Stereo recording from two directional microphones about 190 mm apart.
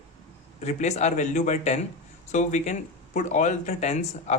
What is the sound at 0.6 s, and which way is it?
Speech, 35° left (ahead or behind).